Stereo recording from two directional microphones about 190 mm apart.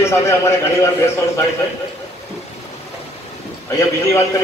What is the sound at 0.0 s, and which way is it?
A man's voice, 15° left (ahead or behind).